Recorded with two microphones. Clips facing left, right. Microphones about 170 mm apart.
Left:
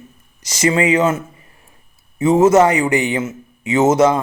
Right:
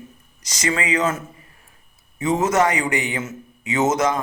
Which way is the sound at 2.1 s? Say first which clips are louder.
Left 8 dB; 25° left (ahead or behind).